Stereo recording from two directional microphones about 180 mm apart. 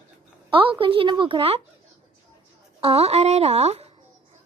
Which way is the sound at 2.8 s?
35° right (ahead or behind).